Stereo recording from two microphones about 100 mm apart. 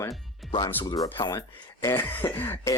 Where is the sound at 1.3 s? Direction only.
30° left (ahead or behind).